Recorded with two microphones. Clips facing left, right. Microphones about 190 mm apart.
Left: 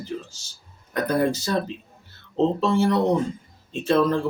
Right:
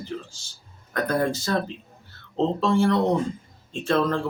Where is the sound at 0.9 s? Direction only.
15° left (ahead or behind).